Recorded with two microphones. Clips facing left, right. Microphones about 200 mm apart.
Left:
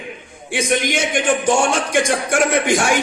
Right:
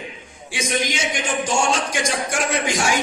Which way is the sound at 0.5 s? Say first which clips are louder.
Left 5 dB; 55° left (ahead or behind).